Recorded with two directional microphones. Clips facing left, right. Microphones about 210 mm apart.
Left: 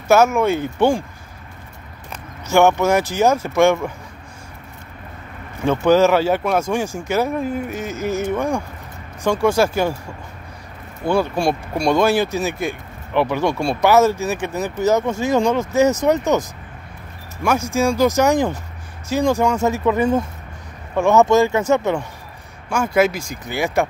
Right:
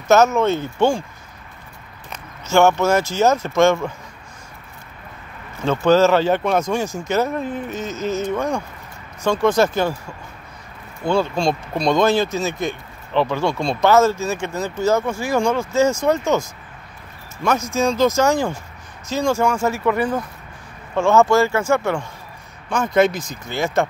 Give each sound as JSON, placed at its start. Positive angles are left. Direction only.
{"t": 0.1, "sound": "speech", "side_deg": 10}
{"t": 2.0, "sound": "speech", "side_deg": 15}
{"t": 5.6, "sound": "speech", "side_deg": 15}
{"t": 11.1, "sound": "speech", "side_deg": 15}
{"t": 22.9, "sound": "speech", "side_deg": 10}